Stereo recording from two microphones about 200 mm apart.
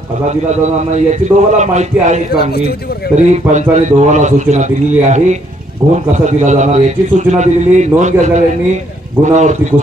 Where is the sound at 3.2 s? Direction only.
35° right (ahead or behind).